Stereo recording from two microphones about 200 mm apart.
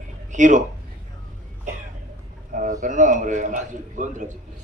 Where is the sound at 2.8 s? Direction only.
40° right (ahead or behind).